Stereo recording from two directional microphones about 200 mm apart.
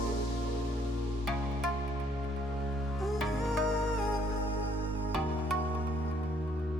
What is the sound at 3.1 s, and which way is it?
Music, centre (ahead or behind).